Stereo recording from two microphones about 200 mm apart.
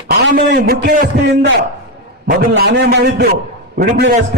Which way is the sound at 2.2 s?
50° right (ahead or behind).